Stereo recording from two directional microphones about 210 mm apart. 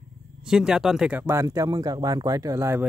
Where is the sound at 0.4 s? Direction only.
5° right (ahead or behind).